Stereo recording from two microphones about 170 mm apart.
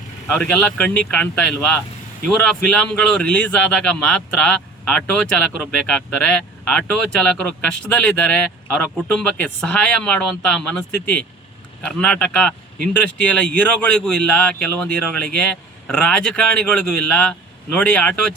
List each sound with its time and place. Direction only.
0.3 s a man's voice: 5° left (ahead or behind)